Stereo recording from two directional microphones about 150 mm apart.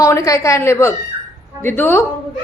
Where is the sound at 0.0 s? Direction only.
20° left (ahead or behind).